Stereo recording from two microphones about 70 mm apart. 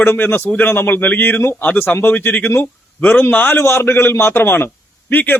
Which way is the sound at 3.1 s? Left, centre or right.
Left.